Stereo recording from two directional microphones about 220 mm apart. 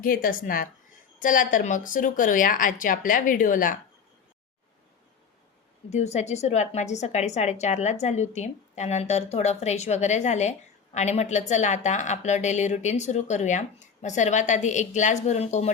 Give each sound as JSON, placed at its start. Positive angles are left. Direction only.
{"t": 0.0, "sound": "a woman's voice", "side_deg": 40}
{"t": 5.9, "sound": "a woman's voice", "side_deg": 30}